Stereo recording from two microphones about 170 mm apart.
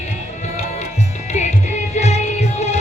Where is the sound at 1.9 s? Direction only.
40° left (ahead or behind).